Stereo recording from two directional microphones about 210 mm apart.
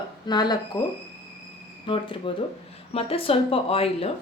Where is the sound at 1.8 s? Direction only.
25° left (ahead or behind).